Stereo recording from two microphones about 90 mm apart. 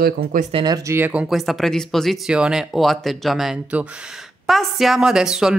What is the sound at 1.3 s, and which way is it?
Speech, centre (ahead or behind).